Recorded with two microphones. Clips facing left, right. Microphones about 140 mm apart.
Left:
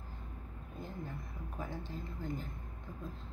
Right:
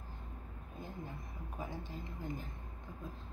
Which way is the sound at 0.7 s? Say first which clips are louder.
Left 2 dB; 15° right (ahead or behind).